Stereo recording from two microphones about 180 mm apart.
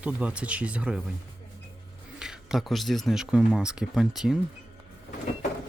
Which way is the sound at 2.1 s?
5° right (ahead or behind).